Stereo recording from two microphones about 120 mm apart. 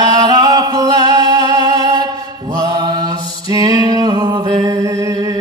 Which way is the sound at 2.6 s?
35° right (ahead or behind).